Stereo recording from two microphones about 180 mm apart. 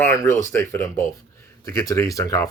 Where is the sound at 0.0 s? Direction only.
15° left (ahead or behind).